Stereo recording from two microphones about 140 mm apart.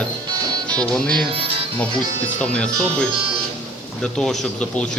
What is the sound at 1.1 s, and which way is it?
Speech, 40° right (ahead or behind).